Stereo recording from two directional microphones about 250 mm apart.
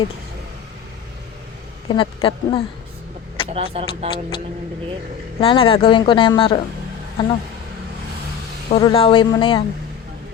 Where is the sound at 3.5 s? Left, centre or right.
Right.